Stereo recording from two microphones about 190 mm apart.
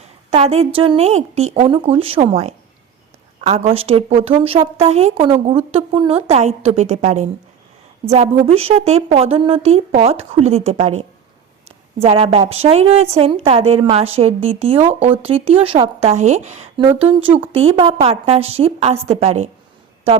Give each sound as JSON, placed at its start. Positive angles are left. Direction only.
{"t": 0.3, "sound": "a woman's voice", "side_deg": -30}
{"t": 11.9, "sound": "a woman's voice", "side_deg": -30}